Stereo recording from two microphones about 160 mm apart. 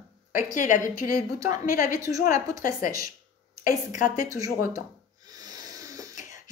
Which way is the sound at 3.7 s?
55° left (ahead or behind).